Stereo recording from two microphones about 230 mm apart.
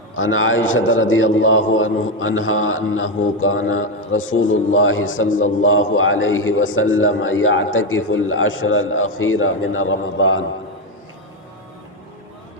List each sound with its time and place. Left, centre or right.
0.2 s a man's voice: left